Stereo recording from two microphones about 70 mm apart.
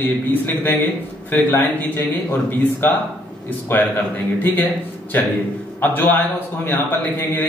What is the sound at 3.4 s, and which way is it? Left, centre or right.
A man's voice, left.